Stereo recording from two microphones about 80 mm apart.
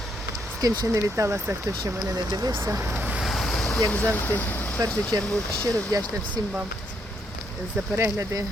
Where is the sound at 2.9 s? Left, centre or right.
Centre.